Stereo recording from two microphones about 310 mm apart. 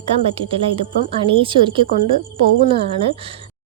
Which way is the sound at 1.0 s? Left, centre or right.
Centre.